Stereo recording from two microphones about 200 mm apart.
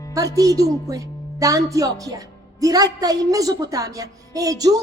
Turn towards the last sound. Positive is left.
turn(degrees=-15)  # may be behind; listen again after turning